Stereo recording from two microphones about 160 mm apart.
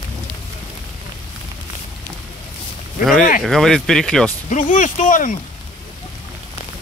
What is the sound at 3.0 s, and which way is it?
Speech, centre (ahead or behind).